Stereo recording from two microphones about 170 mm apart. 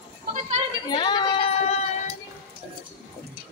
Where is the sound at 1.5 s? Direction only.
40° left (ahead or behind).